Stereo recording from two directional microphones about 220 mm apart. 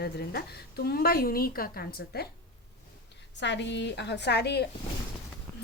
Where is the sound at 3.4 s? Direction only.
55° left (ahead or behind).